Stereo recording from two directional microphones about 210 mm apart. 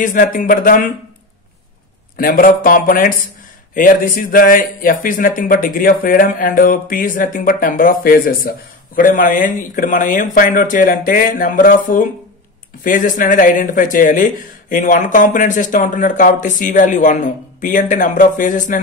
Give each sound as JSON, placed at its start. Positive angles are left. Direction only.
{"t": 0.0, "sound": "speech", "side_deg": 40}
{"t": 2.1, "sound": "speech", "side_deg": 45}